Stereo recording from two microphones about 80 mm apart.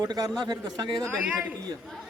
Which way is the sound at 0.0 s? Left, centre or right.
Right.